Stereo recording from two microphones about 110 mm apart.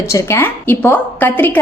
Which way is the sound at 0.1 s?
25° left (ahead or behind).